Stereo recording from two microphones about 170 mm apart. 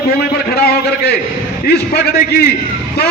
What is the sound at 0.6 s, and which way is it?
Speech, 65° left (ahead or behind).